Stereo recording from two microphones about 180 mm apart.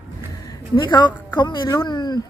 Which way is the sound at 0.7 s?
25° left (ahead or behind).